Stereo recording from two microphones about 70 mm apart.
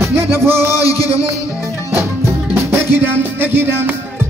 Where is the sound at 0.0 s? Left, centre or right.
Right.